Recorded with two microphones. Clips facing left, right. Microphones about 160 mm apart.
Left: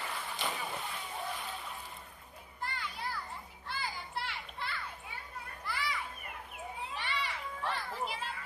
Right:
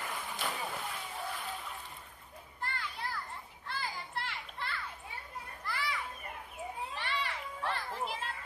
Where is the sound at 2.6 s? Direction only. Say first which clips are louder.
Even; centre (ahead or behind).